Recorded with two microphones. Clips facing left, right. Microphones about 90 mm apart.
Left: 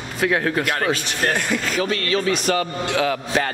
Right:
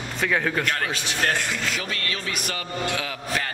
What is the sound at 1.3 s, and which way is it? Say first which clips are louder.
Speech: left 4 dB; 55° left (ahead or behind).